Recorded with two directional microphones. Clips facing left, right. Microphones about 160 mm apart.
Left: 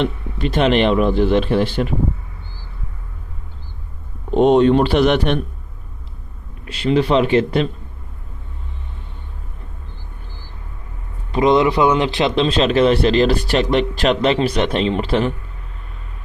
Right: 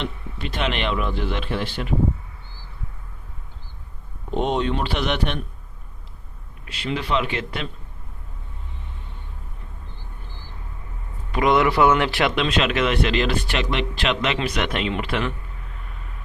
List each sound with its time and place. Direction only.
0.0 s speech: 40° left (ahead or behind)
4.4 s speech: 45° left (ahead or behind)
6.7 s speech: 35° left (ahead or behind)
11.3 s a man's voice: 20° left (ahead or behind)
12.3 s speech: 30° left (ahead or behind)